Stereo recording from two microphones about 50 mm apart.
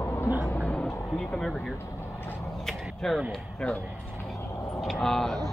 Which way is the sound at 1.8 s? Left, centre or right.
Left.